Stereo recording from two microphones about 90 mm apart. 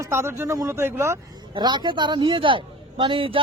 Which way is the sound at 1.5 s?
60° right (ahead or behind).